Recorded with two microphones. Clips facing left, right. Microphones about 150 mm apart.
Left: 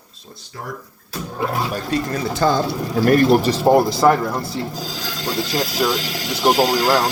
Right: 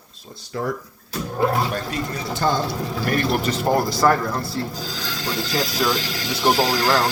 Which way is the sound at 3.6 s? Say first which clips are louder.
Left 2 dB; 20° left (ahead or behind).